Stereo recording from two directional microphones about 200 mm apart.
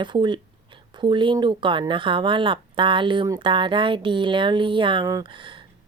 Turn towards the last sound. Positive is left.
turn(degrees=-25)  # may be behind; listen again after turning